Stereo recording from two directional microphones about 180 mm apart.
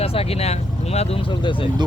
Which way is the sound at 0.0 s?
30° left (ahead or behind).